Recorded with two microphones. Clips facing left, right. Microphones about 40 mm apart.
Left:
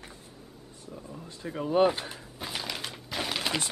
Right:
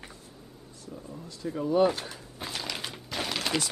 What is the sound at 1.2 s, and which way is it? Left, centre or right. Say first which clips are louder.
Speech: right 2 dB; left.